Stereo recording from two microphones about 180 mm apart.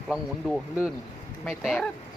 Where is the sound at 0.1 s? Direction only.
Centre (ahead or behind).